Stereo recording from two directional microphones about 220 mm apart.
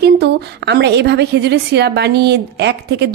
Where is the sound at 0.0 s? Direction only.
50° right (ahead or behind).